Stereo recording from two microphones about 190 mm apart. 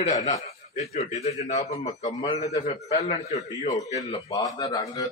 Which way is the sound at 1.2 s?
35° left (ahead or behind).